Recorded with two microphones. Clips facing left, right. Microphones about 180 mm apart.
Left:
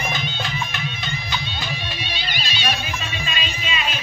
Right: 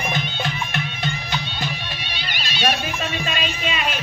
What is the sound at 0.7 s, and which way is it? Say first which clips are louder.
Music: right 3 dB; 60° right (ahead or behind).